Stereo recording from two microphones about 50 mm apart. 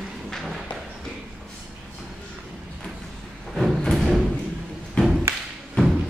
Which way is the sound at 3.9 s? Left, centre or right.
Centre.